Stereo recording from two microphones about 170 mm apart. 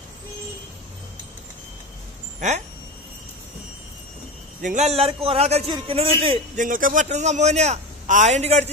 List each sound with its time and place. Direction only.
2.4 s a man's voice: 45° right (ahead or behind)
4.6 s a man's voice: 45° right (ahead or behind)
6.6 s a man's voice: 50° right (ahead or behind)